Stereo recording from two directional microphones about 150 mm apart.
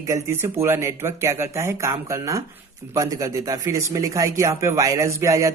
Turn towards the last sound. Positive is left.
turn(degrees=-20)  # may be behind; listen again after turning